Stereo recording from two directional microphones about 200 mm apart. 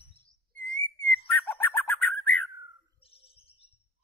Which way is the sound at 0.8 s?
10° left (ahead or behind).